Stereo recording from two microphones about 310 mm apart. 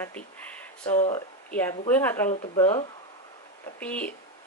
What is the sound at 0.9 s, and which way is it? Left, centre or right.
Speech, left.